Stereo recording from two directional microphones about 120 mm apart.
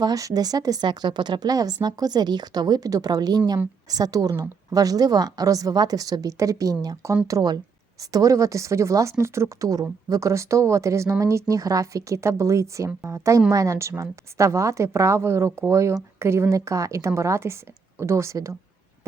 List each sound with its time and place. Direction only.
0.0 s a woman's voice: 30° right (ahead or behind)